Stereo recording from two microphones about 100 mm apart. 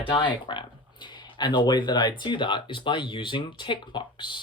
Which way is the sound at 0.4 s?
55° left (ahead or behind).